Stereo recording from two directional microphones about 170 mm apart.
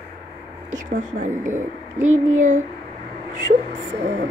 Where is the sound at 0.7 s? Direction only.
50° right (ahead or behind).